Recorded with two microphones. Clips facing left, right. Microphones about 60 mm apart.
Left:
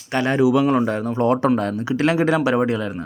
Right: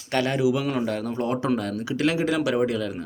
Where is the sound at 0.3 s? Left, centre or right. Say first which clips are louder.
Left 10 dB; left.